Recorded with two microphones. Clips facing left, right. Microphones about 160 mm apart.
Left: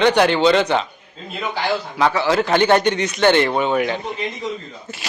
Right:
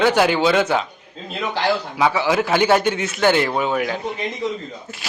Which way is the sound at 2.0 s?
10° right (ahead or behind).